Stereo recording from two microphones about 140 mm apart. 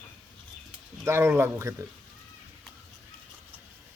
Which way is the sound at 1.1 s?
20° right (ahead or behind).